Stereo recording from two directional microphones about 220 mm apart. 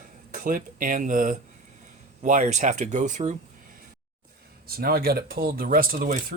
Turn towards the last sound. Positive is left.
turn(degrees=-40)  # may be behind; listen again after turning